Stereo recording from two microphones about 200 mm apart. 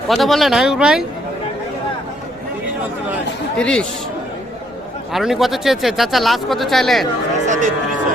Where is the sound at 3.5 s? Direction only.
5° left (ahead or behind).